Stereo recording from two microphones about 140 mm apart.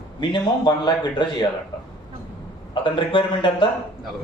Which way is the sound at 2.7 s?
35° left (ahead or behind).